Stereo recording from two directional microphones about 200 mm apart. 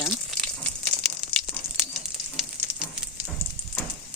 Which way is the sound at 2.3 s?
Centre (ahead or behind).